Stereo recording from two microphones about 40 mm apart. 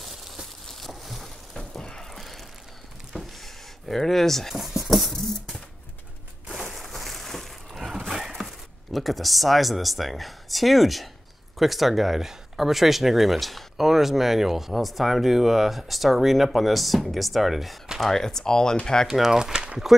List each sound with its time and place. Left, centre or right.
0.7 s a sound: centre
2.1 s a sound: centre
3.9 s speech: centre
4.6 s speech: centre
5.1 s music: centre
6.5 s a sound: centre
8.1 s speech: centre
18.0 s speech: centre
19.0 s speech: centre